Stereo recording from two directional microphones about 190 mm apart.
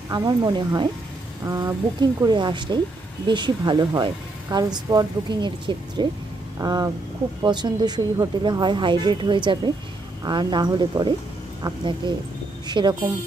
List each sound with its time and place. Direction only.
0.1 s speech: 20° right (ahead or behind)